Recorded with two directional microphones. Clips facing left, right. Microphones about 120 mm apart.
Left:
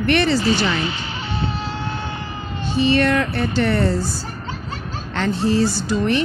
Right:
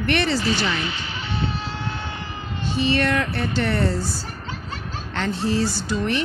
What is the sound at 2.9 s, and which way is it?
Speech, 40° left (ahead or behind).